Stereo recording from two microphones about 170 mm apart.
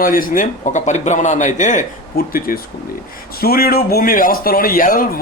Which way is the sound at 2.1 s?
60° left (ahead or behind).